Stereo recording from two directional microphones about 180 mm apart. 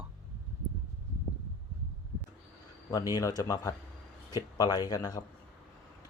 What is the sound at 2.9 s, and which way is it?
Speech, 20° left (ahead or behind).